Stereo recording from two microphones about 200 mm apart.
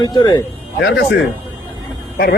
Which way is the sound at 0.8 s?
55° left (ahead or behind).